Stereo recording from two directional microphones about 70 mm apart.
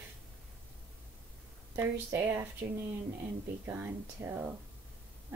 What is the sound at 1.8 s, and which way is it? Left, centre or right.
Speech, right.